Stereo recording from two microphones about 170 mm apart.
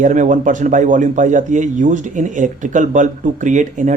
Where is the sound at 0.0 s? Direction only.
45° right (ahead or behind).